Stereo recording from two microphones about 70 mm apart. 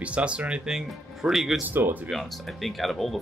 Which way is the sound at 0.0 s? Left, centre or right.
Centre.